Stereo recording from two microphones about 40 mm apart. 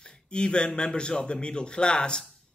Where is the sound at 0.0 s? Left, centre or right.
Left.